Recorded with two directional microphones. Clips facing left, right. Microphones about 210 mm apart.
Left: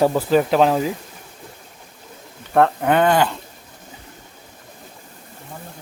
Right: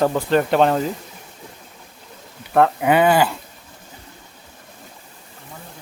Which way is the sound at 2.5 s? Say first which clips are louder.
Even; 5° right (ahead or behind).